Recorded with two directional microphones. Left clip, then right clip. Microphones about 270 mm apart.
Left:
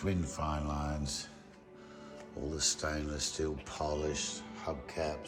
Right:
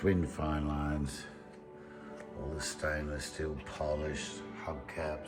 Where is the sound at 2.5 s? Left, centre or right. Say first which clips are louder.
Left 1 dB; centre.